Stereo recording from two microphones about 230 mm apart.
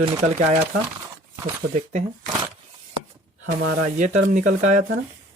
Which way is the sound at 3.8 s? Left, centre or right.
Right.